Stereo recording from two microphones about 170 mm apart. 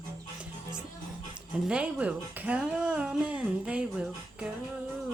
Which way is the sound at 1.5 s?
5° right (ahead or behind).